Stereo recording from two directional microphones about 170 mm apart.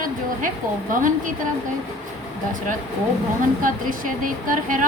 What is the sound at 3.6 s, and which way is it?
Speech, 55° right (ahead or behind).